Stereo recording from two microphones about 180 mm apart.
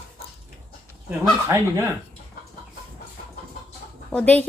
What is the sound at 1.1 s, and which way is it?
Speech, 15° right (ahead or behind).